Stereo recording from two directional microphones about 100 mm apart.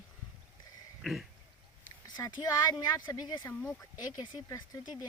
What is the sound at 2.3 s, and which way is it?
Speech, 45° left (ahead or behind).